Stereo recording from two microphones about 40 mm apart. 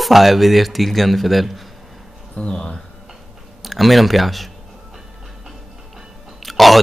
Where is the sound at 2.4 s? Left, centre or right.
Left.